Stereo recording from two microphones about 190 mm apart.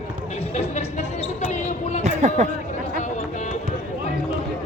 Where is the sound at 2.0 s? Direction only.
40° right (ahead or behind).